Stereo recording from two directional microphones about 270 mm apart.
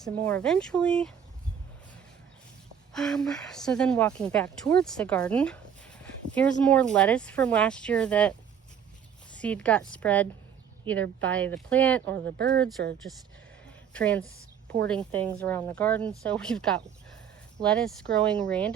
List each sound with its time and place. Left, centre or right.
0.0 s speech: centre
2.9 s speech: centre
11.3 s speech: centre
12.1 s speech: right
13.9 s speech: centre